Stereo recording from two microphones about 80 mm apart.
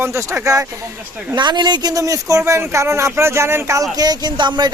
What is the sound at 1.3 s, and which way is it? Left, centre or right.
Speech, right.